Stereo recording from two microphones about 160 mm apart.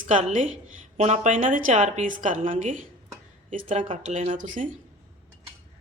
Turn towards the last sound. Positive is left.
turn(degrees=-55)  # may be behind; listen again after turning